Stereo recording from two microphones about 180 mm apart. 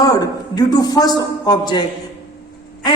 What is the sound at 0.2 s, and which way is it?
A man's voice, 20° left (ahead or behind).